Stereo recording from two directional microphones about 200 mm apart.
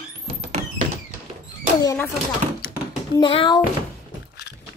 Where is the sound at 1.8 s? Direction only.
15° left (ahead or behind).